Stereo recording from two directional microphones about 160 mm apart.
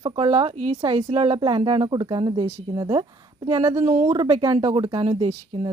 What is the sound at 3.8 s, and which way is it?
Speech, 45° right (ahead or behind).